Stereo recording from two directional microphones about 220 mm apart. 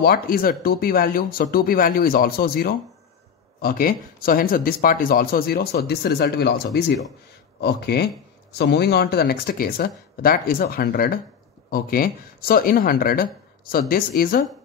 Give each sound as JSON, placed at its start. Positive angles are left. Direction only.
{"t": 0.0, "sound": "speech", "side_deg": 40}